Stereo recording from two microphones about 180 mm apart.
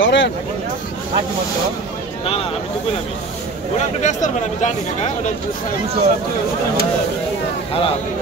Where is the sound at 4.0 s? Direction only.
40° left (ahead or behind).